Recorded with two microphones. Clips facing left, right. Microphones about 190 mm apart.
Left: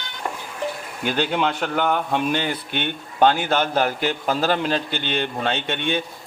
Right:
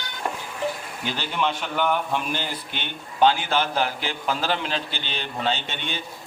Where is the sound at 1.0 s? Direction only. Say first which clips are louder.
Left 5 dB; 55° left (ahead or behind); by 1.7 s 70° left (ahead or behind).